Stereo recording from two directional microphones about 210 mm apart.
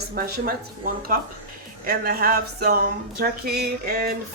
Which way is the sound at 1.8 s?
45° right (ahead or behind).